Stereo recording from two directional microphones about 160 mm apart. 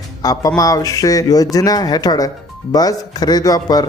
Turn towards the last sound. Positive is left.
turn(degrees=25)  # may be behind; listen again after turning